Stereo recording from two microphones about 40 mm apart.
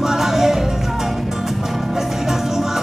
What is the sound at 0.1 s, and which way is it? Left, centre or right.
Music, centre.